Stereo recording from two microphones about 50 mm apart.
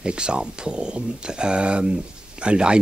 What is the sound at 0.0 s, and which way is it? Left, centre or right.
Speech, centre.